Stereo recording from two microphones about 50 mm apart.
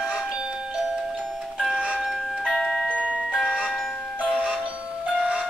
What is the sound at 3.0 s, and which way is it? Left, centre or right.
Glockenspiel, right.